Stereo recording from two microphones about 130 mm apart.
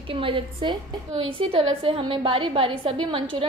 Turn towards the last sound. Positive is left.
turn(degrees=-45)  # may be behind; listen again after turning